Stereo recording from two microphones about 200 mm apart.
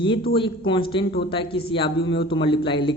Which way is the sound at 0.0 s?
25° left (ahead or behind).